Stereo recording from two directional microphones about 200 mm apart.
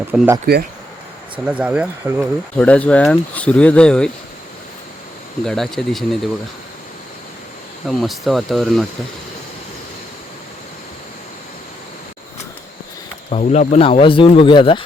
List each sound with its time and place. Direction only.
0.1 s speech: 5° right (ahead or behind)
1.5 s speech: 5° right (ahead or behind)
2.6 s speech: 5° left (ahead or behind)
5.5 s speech: centre (ahead or behind)
7.9 s speech: centre (ahead or behind)
13.3 s speech: 35° left (ahead or behind)